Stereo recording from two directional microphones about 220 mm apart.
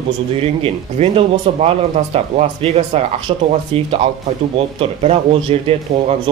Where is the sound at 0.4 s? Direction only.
25° right (ahead or behind).